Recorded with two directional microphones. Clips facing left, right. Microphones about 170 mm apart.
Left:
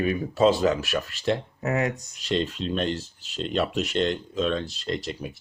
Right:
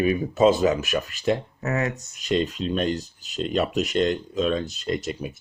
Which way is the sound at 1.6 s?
15° left (ahead or behind).